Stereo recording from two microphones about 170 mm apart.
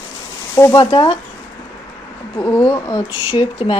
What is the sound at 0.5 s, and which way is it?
Speech, 15° left (ahead or behind).